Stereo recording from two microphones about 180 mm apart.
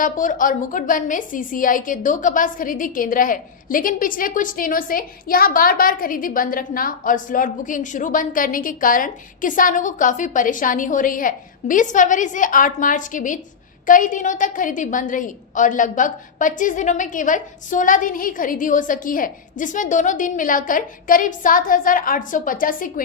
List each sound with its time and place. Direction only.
0.0 s a woman's voice: 45° left (ahead or behind)